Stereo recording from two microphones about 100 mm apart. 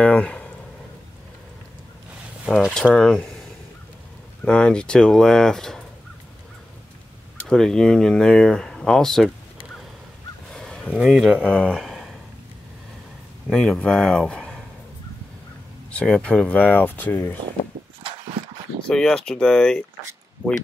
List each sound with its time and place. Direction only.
0.0 s a sound: 10° left (ahead or behind)
2.4 s speech: centre (ahead or behind)
4.5 s speech: 10° left (ahead or behind)
7.4 s speech: 5° left (ahead or behind)
10.5 s fowl: 5° left (ahead or behind)
10.9 s speech: 5° right (ahead or behind)
11.8 s a sound: centre (ahead or behind)
13.5 s speech: 5° left (ahead or behind)
15.9 s speech: 10° left (ahead or behind)
18.9 s speech: 5° left (ahead or behind)